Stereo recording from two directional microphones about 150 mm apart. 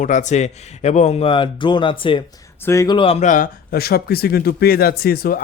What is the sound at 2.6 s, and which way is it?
Speech, 20° left (ahead or behind).